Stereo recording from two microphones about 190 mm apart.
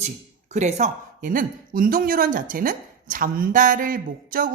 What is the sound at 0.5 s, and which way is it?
A woman's voice, 40° right (ahead or behind).